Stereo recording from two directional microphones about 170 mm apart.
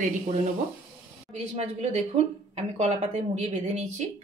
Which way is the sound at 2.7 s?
40° right (ahead or behind).